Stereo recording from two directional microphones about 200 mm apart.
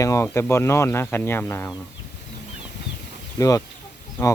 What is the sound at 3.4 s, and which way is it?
Speech, 15° left (ahead or behind).